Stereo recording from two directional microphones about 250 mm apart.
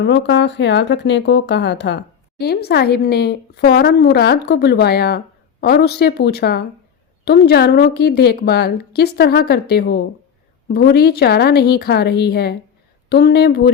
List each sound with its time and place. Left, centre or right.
0.0 s speech: left